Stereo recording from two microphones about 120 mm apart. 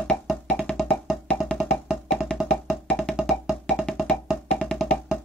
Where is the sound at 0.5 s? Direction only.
10° left (ahead or behind).